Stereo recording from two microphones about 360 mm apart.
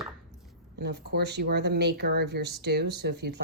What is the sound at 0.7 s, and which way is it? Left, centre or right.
Speech, right.